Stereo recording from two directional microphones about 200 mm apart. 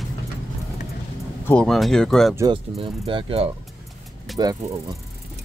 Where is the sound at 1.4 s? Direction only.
5° left (ahead or behind).